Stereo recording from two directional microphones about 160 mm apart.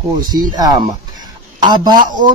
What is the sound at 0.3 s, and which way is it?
Speech, 25° right (ahead or behind).